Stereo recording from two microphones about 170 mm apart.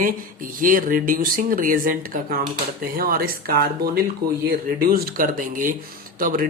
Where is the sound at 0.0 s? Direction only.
55° right (ahead or behind).